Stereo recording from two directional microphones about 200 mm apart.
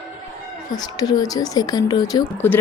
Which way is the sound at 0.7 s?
20° left (ahead or behind).